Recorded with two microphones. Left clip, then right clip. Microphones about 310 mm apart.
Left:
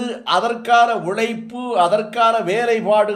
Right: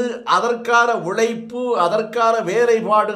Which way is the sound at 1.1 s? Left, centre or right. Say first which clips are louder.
Right 2 dB; centre.